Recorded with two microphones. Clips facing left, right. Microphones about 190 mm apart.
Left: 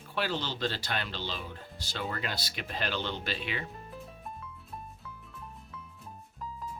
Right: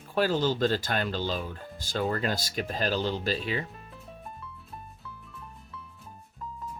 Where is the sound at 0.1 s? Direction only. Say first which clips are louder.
Right 8 dB; 40° right (ahead or behind).